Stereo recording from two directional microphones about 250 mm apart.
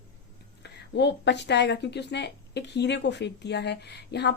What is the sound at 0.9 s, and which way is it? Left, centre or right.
A woman's voice, left.